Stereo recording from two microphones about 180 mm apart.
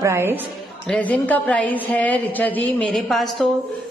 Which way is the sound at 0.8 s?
5° left (ahead or behind).